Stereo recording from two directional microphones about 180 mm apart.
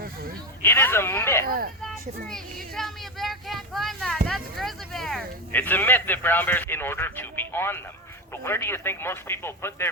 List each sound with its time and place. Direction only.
0.6 s speech: 10° left (ahead or behind)
1.5 s speech: 55° right (ahead or behind)
1.8 s speech: centre (ahead or behind)
4.3 s a sound: centre (ahead or behind)
8.4 s speech: 15° left (ahead or behind)